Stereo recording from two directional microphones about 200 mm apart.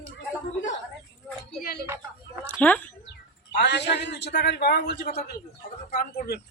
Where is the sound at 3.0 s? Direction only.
60° left (ahead or behind).